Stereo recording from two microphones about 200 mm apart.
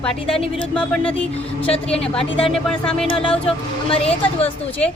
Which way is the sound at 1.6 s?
30° left (ahead or behind).